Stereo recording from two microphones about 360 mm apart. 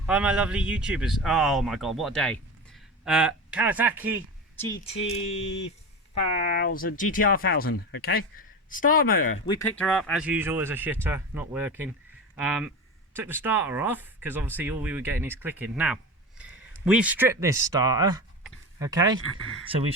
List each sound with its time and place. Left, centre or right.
0.0 s speech: centre
4.6 s speech: centre
9.5 s speech: centre